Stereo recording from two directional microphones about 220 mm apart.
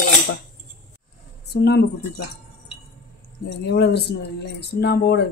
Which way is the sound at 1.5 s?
50° left (ahead or behind).